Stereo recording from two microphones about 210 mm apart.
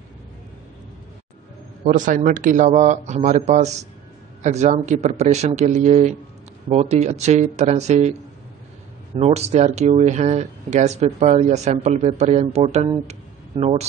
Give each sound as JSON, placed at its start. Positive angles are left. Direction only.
{"t": 1.9, "sound": "speech", "side_deg": -40}